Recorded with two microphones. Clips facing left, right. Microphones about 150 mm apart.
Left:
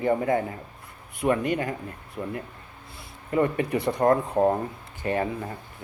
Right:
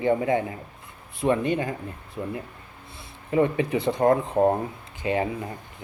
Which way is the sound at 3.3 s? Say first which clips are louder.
Right 2 dB; 25° right (ahead or behind).